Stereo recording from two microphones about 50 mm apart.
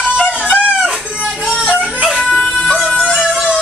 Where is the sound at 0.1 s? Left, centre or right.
Centre.